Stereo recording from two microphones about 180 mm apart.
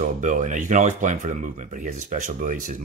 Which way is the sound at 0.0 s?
45° right (ahead or behind).